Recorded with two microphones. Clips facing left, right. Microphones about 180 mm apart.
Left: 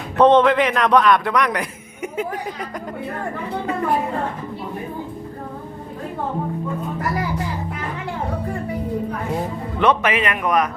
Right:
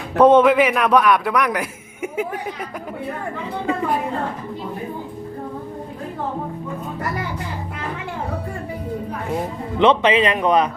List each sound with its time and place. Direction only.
0.2 s a man's voice: 10° right (ahead or behind)
9.7 s speech: 25° right (ahead or behind)